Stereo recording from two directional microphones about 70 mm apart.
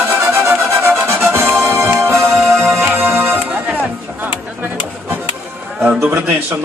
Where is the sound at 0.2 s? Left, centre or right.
Right.